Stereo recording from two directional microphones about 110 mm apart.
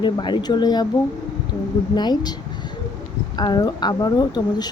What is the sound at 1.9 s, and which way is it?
Speech, 40° left (ahead or behind).